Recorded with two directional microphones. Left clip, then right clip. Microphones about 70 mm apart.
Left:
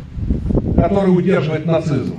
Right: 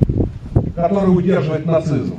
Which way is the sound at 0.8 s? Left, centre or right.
Left.